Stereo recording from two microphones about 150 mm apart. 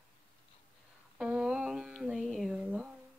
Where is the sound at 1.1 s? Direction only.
5° right (ahead or behind).